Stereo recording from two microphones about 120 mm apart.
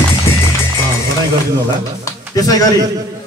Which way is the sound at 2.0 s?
30° left (ahead or behind).